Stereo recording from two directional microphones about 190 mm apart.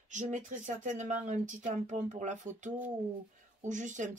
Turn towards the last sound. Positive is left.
turn(degrees=-40)  # may be behind; listen again after turning